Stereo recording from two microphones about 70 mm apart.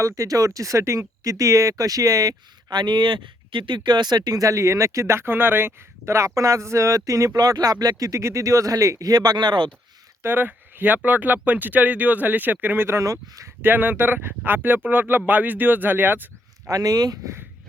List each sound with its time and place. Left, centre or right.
0.0 s speech: right
7.3 s speech: right
10.2 s speech: right
13.0 s speech: right
13.6 s speech: right
16.6 s speech: right